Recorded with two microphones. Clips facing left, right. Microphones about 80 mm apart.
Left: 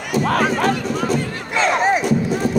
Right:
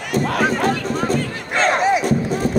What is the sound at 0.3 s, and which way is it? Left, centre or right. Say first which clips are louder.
Crowd: left 1 dB; left.